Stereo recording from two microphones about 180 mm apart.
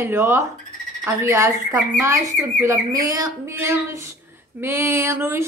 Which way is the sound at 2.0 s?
15° right (ahead or behind).